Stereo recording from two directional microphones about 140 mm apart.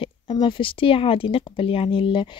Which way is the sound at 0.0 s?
35° left (ahead or behind).